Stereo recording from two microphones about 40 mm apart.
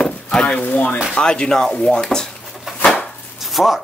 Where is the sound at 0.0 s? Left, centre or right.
Left.